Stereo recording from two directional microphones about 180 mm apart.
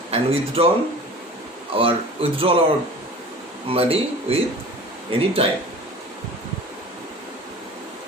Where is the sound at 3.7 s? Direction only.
30° right (ahead or behind).